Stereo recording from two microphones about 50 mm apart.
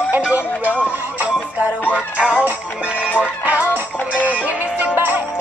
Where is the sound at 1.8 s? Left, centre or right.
Right.